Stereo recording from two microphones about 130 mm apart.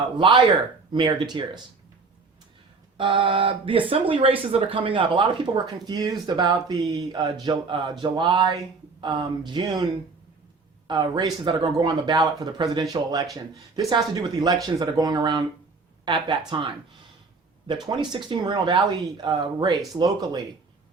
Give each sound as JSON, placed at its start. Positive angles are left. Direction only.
{"t": 0.2, "sound": "speech", "side_deg": -40}
{"t": 3.0, "sound": "speech", "side_deg": -40}
{"t": 10.8, "sound": "speech", "side_deg": -35}